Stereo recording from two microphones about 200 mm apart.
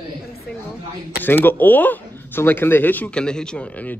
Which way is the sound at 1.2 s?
10° left (ahead or behind).